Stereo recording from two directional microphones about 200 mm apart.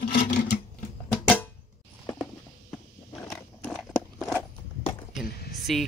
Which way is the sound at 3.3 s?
Centre (ahead or behind).